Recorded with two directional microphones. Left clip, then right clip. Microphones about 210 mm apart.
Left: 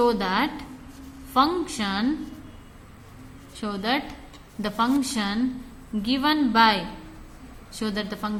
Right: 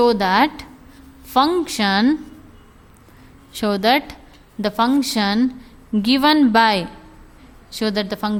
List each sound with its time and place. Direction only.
0.0 s a woman's voice: 45° right (ahead or behind)
3.5 s a woman's voice: 50° right (ahead or behind)